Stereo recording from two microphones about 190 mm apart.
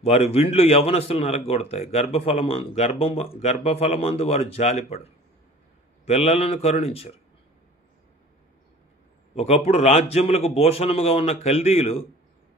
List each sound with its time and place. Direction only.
0.0 s a man's voice: 35° left (ahead or behind)
9.3 s a man's voice: 35° left (ahead or behind)